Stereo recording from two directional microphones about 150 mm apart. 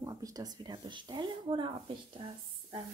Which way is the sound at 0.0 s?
25° right (ahead or behind).